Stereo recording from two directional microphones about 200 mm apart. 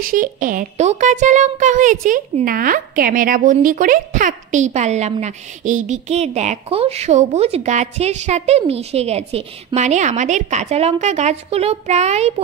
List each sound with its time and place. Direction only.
0.0 s speech: 45° right (ahead or behind)